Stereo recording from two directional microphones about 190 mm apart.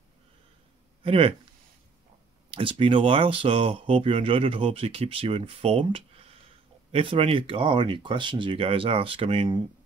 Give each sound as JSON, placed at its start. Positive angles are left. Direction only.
{"t": 1.0, "sound": "speech", "side_deg": -30}
{"t": 2.5, "sound": "speech", "side_deg": -25}